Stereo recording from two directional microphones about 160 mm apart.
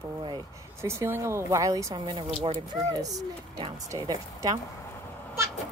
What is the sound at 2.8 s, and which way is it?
A woman's voice, 25° right (ahead or behind).